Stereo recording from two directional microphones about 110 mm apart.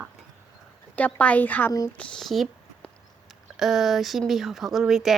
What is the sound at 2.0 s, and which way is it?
Speech, 5° left (ahead or behind).